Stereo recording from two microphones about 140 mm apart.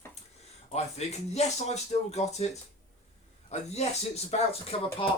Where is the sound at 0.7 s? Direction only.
50° left (ahead or behind).